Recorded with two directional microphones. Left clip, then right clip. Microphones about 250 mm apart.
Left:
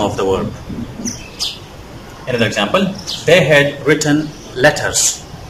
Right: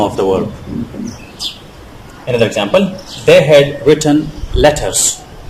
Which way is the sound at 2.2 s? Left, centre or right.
Centre.